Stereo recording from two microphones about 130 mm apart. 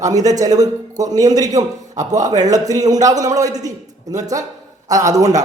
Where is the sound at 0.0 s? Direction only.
30° right (ahead or behind).